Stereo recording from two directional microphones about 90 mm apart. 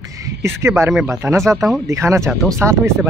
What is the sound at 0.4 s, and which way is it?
Speech, 30° right (ahead or behind).